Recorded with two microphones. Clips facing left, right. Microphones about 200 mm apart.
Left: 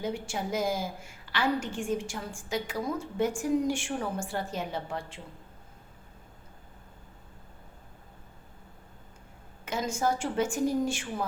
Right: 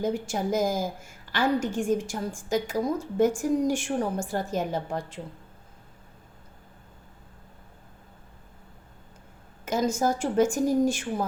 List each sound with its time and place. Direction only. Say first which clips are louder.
0.0 s a woman's voice: right 5 dB; 40° right (ahead or behind)
9.6 s a woman's voice: right 4 dB; 40° right (ahead or behind)